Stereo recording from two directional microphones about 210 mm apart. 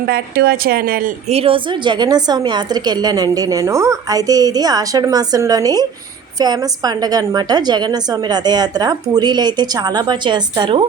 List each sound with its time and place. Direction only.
0.0 s speech: 50° right (ahead or behind)
1.3 s a woman's voice: 25° right (ahead or behind)